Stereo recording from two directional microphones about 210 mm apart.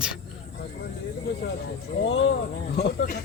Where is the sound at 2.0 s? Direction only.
60° left (ahead or behind).